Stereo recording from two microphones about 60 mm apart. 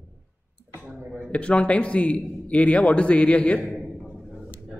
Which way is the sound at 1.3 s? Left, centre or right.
Centre.